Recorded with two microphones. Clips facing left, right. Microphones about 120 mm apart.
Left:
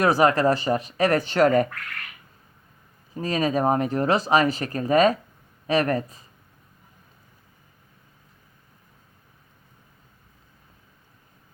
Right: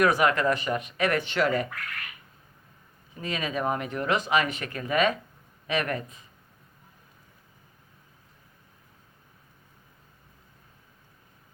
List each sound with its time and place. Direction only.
0.0 s speech: 30° left (ahead or behind)
3.2 s speech: 40° left (ahead or behind)